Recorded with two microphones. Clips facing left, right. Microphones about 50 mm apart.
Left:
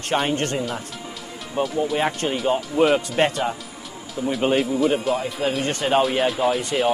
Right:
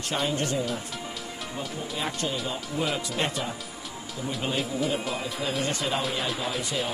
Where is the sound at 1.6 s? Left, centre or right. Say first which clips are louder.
Left 12 dB; left.